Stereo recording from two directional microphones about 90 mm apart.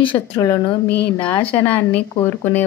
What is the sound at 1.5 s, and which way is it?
A woman's voice, 20° left (ahead or behind).